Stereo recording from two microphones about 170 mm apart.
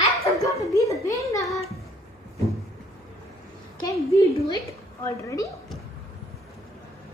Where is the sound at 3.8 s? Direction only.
20° left (ahead or behind).